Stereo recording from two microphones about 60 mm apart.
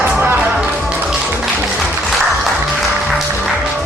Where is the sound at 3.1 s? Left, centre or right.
Centre.